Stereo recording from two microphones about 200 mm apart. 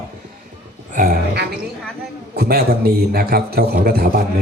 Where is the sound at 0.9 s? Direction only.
45° right (ahead or behind).